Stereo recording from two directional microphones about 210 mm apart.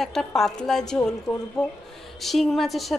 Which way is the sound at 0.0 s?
Centre (ahead or behind).